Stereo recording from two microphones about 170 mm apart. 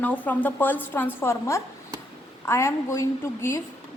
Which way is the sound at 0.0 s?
10° left (ahead or behind).